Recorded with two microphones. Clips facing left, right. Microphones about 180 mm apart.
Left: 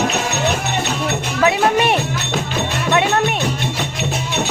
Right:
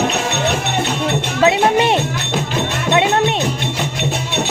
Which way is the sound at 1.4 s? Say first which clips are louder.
Right 2 dB; 25° right (ahead or behind).